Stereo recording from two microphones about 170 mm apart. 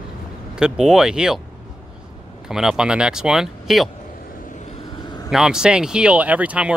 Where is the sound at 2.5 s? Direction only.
5° right (ahead or behind).